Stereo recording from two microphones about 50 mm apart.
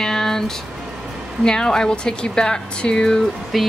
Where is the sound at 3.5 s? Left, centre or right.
Centre.